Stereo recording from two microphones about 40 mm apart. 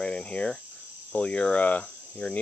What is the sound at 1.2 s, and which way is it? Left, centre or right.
Speech, left.